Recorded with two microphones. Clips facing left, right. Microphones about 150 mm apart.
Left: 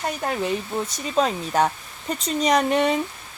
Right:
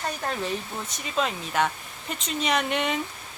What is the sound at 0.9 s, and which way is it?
Speech, 35° left (ahead or behind).